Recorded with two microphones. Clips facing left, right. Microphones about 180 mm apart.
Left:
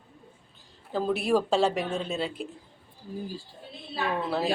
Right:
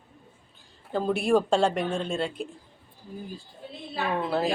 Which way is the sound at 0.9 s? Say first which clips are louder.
Right 2 dB; centre (ahead or behind).